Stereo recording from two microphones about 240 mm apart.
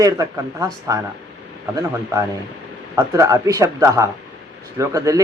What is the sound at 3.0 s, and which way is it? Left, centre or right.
Speech, centre.